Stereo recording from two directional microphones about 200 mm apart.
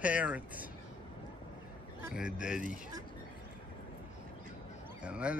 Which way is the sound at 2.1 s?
5° right (ahead or behind).